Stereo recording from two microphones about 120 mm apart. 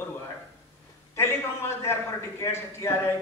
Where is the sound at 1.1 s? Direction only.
20° left (ahead or behind).